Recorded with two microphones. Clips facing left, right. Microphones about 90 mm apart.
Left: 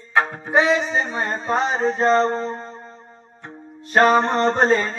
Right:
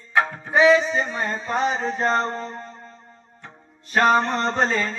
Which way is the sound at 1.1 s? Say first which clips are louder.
Left 3 dB; 45° left (ahead or behind).